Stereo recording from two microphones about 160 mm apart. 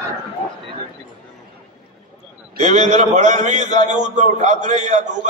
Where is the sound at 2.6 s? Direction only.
50° right (ahead or behind).